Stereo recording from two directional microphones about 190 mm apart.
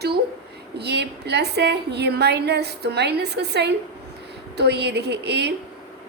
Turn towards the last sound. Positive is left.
turn(degrees=-60)  # may be behind; listen again after turning